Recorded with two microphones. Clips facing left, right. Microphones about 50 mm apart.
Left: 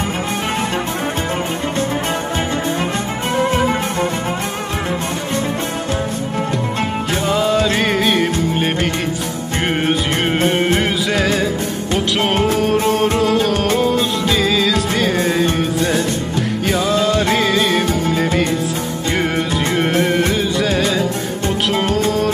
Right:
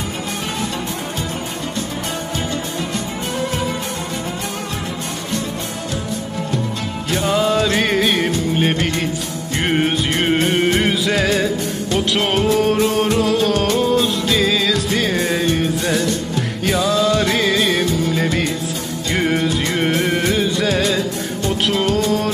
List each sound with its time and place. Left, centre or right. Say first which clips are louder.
3.3 s music: left 7 dB; left
7.3 s music: left 1 dB; centre
13.2 s music: left 1 dB; centre
16.7 s music: even; left
17.4 s music: left 1 dB; centre
19.1 s music: right 1 dB; centre